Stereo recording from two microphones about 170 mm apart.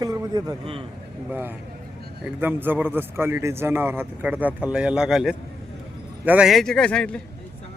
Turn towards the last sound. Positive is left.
turn(degrees=5)  # may be behind; listen again after turning